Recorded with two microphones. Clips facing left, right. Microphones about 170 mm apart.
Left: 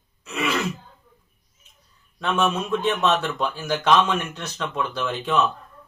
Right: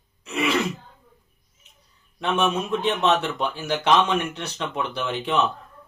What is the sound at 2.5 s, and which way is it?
Speech, 15° right (ahead or behind).